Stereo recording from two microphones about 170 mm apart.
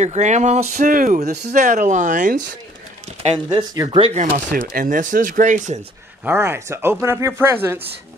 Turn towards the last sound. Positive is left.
turn(degrees=-15)  # may be behind; listen again after turning